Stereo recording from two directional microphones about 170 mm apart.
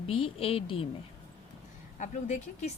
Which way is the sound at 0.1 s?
30° left (ahead or behind).